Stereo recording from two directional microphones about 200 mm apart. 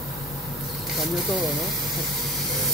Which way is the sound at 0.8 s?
Centre (ahead or behind).